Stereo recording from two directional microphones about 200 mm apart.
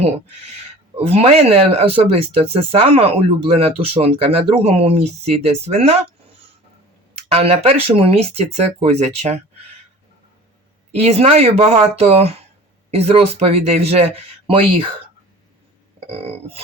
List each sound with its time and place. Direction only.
0.9 s speech: 30° right (ahead or behind)
10.9 s speech: 30° right (ahead or behind)
16.0 s a sound: 30° right (ahead or behind)